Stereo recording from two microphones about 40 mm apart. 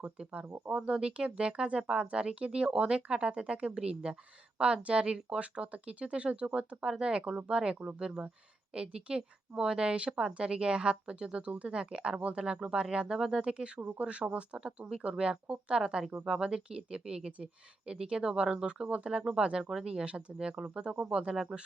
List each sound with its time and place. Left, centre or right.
0.7 s speech: centre
13.5 s speech: right